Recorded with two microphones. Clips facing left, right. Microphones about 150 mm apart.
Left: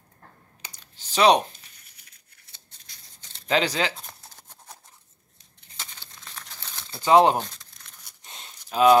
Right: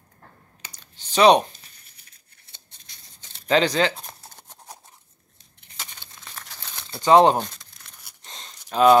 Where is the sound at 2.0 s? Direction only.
25° right (ahead or behind).